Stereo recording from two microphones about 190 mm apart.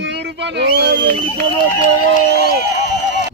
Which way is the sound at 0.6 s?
65° right (ahead or behind).